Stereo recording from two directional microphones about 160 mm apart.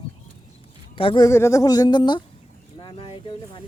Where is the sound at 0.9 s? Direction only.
35° left (ahead or behind).